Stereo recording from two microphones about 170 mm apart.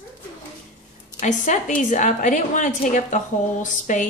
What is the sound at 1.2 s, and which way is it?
Speech, 45° left (ahead or behind).